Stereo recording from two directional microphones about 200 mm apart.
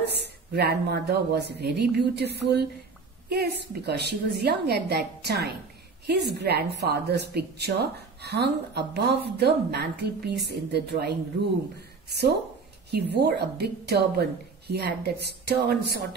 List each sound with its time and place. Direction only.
0.5 s a woman's voice: 55° right (ahead or behind)
12.9 s a woman's voice: 55° right (ahead or behind)